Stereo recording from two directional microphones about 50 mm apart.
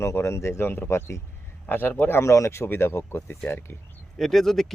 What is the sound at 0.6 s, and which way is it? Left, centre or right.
Speech, left.